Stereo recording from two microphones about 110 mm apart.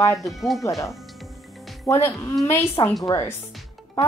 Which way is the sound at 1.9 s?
25° left (ahead or behind).